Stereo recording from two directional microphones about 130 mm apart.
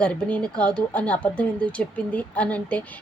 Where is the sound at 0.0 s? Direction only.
10° left (ahead or behind).